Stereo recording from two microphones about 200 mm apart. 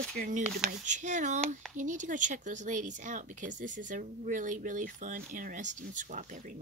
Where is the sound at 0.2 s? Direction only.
40° right (ahead or behind).